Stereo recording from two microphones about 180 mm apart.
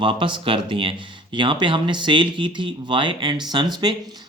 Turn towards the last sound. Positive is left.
turn(degrees=-25)  # may be behind; listen again after turning